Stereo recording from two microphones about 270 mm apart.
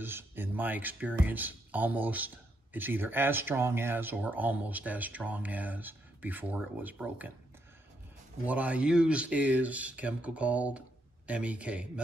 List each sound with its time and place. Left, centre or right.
0.0 s speech: centre
8.5 s speech: centre